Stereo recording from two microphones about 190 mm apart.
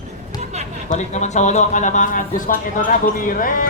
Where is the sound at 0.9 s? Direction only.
35° left (ahead or behind).